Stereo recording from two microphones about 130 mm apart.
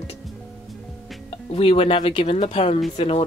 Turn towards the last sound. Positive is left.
turn(degrees=50)  # may be behind; listen again after turning